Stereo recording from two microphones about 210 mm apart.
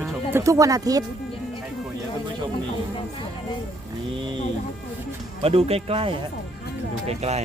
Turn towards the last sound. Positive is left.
turn(degrees=-30)  # may be behind; listen again after turning